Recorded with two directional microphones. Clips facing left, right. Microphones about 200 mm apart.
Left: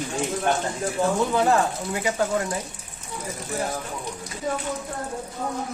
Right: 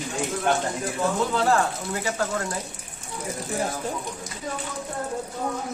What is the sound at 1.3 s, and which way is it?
Speech, 15° left (ahead or behind).